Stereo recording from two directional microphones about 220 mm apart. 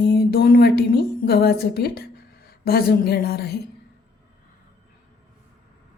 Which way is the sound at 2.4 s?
45° left (ahead or behind).